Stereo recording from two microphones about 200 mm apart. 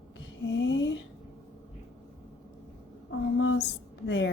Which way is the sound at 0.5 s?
65° left (ahead or behind).